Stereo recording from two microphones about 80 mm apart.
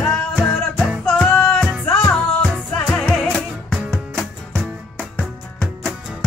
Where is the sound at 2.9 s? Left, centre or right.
Centre.